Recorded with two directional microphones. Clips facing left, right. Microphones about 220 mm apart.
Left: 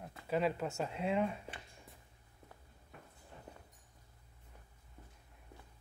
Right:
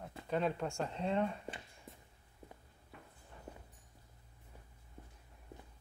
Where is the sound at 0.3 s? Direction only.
5° left (ahead or behind).